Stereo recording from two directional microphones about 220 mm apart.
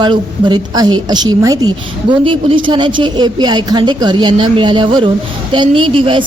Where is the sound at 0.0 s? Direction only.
20° right (ahead or behind).